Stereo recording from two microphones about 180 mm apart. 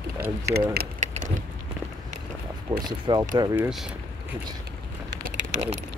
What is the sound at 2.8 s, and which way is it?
Speech, 25° right (ahead or behind).